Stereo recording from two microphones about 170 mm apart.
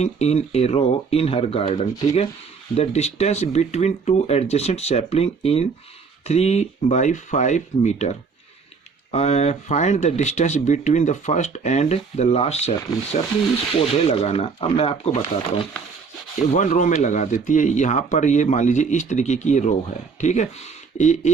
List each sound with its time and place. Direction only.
0.0 s speech: 40° left (ahead or behind)
9.1 s speech: 40° left (ahead or behind)
13.7 s speech: 35° left (ahead or behind)
16.4 s speech: 45° left (ahead or behind)